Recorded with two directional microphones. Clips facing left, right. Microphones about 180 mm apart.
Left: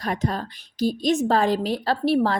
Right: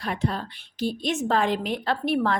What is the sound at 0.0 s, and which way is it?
A woman's voice, 40° left (ahead or behind).